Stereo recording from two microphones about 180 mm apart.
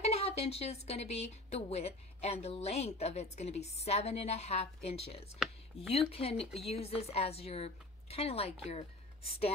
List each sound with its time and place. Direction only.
0.0 s speech: 35° left (ahead or behind)